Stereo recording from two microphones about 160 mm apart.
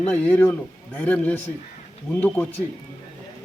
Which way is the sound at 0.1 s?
10° left (ahead or behind).